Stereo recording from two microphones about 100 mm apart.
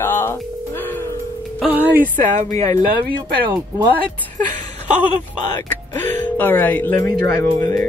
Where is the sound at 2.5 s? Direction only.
35° left (ahead or behind).